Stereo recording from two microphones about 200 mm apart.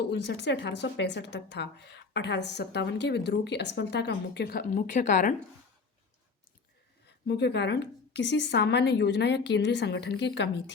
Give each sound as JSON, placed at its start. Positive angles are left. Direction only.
{"t": 0.1, "sound": "speech", "side_deg": 60}
{"t": 7.3, "sound": "speech", "side_deg": 60}